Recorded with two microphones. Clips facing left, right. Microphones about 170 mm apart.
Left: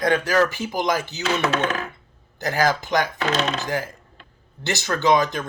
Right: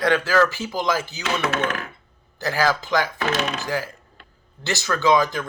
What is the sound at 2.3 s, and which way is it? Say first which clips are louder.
Speech: left 1 dB; 20° left (ahead or behind).